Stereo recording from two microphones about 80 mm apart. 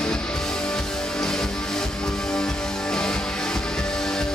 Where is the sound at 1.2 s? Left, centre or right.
Centre.